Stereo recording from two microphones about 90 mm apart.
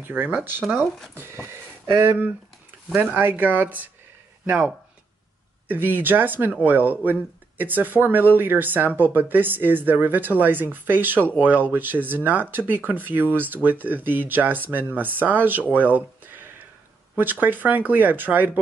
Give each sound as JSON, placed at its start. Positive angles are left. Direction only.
{"t": 0.0, "sound": "speech", "side_deg": -20}
{"t": 15.7, "sound": "a sound", "side_deg": -20}
{"t": 17.2, "sound": "speech", "side_deg": -20}